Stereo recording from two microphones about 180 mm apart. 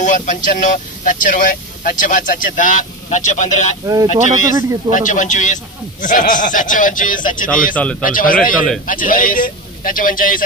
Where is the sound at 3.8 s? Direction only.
20° right (ahead or behind).